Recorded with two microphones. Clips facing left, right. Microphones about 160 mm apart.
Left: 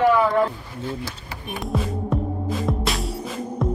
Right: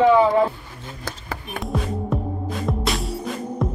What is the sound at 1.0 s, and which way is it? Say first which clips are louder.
Chop: right 2 dB; 55° right (ahead or behind).